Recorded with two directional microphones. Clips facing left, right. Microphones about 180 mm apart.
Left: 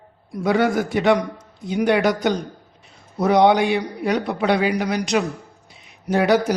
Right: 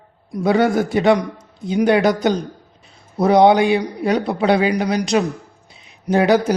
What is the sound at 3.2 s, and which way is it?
A man's voice, 30° right (ahead or behind).